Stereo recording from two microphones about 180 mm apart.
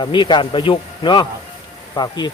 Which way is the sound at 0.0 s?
25° left (ahead or behind).